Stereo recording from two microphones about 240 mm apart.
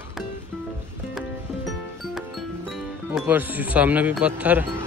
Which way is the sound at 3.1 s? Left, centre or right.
Centre.